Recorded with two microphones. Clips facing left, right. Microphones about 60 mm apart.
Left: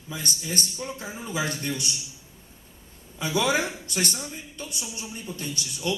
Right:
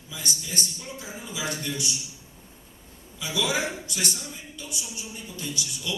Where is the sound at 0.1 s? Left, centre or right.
Left.